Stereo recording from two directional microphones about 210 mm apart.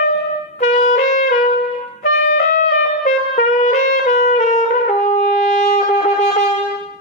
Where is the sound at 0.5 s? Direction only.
35° left (ahead or behind).